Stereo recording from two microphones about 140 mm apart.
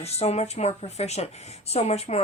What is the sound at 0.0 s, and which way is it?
Speech, 50° left (ahead or behind).